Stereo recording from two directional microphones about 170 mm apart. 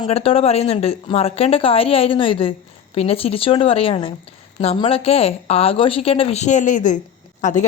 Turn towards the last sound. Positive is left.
turn(degrees=45)  # may be behind; listen again after turning